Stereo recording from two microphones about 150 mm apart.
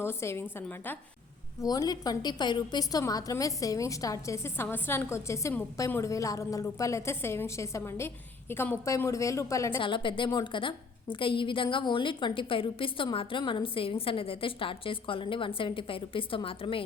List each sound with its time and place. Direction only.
0.0 s a woman's voice: 15° left (ahead or behind)
1.6 s a woman's voice: 25° left (ahead or behind)
9.8 s a woman's voice: 35° left (ahead or behind)